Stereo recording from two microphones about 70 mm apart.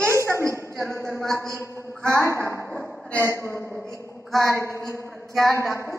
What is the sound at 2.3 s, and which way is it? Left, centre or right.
Speech, right.